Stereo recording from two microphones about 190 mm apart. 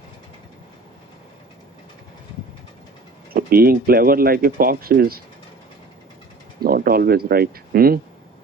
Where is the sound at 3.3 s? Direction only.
50° right (ahead or behind).